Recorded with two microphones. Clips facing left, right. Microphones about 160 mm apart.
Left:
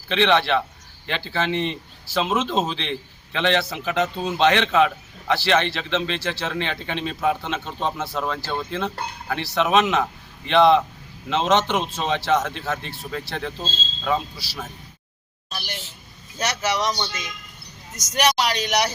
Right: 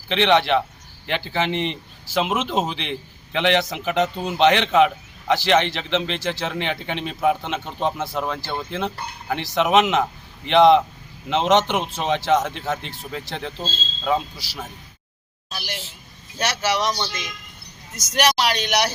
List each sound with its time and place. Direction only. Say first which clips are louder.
0.1 s a man's voice: right 1 dB; 15° right (ahead or behind)
15.4 s speech: right 1 dB; centre (ahead or behind)